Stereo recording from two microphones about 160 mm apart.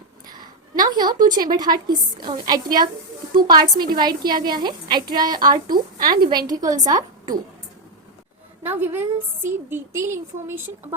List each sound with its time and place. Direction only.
0.8 s a sound: 25° right (ahead or behind)
1.4 s a woman's voice: 25° right (ahead or behind)
8.6 s a woman's voice: 10° right (ahead or behind)